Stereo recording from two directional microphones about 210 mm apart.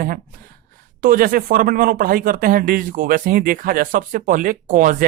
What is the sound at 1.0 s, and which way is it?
Speech, 40° right (ahead or behind).